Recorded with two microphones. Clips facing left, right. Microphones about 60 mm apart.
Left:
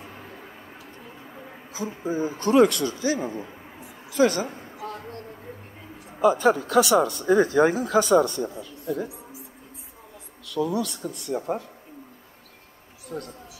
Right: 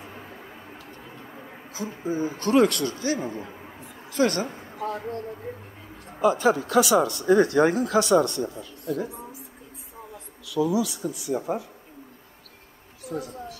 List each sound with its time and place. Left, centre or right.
1.7 s a man's voice: left
4.7 s a sound: right
6.1 s speech: centre
10.5 s speech: centre
13.1 s speech: centre